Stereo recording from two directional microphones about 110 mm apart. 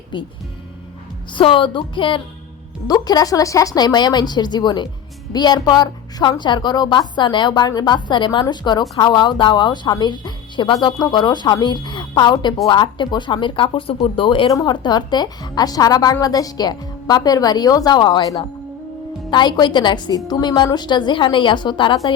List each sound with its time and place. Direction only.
0.1 s speech: 45° left (ahead or behind)
1.3 s speech: 50° left (ahead or behind)
2.8 s a woman's voice: 35° left (ahead or behind)
14.4 s a woman's voice: 35° left (ahead or behind)